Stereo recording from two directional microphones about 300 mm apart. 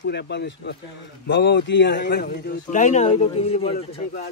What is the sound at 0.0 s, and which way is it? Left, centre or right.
A man's voice, left.